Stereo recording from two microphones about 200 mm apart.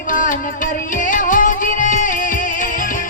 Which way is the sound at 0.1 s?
40° left (ahead or behind).